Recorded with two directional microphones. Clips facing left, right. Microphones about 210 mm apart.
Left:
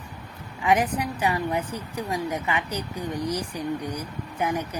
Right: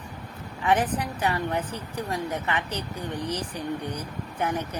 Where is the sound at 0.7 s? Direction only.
10° left (ahead or behind).